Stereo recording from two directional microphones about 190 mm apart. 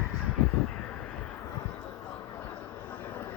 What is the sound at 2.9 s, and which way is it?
Vehicle, 10° left (ahead or behind).